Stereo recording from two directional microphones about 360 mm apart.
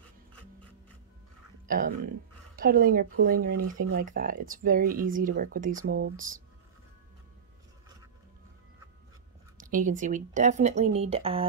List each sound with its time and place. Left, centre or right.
1.7 s speech: right
3.5 s speech: right
3.9 s speech: right
9.6 s speech: right